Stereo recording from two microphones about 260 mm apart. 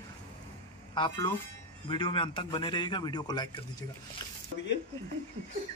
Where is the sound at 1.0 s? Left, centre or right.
Centre.